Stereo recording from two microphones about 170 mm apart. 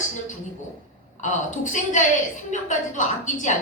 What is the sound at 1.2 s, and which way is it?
A woman's voice, 45° left (ahead or behind).